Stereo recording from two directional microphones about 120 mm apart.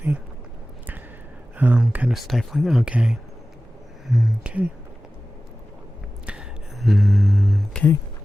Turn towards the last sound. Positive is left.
turn(degrees=0)  # may be behind; listen again after turning